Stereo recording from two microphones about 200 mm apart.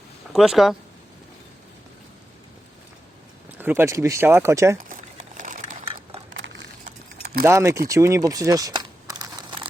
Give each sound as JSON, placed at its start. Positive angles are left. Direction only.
{"t": 0.3, "sound": "speech", "side_deg": 0}
{"t": 3.6, "sound": "speech", "side_deg": -10}
{"t": 4.8, "sound": "crumpling", "side_deg": -40}
{"t": 6.3, "sound": "a sound", "side_deg": -65}
{"t": 7.4, "sound": "speech", "side_deg": -15}
{"t": 7.9, "sound": "crumpling", "side_deg": -15}